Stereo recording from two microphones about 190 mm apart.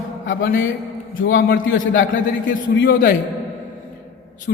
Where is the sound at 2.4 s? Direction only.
45° left (ahead or behind).